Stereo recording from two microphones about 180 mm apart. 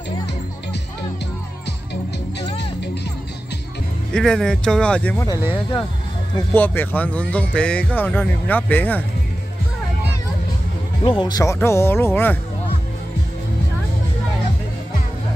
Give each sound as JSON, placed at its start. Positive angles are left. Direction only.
{"t": 2.4, "sound": "music", "side_deg": 70}
{"t": 4.1, "sound": "speech", "side_deg": 5}
{"t": 6.5, "sound": "speech", "side_deg": 10}
{"t": 11.1, "sound": "speech", "side_deg": 25}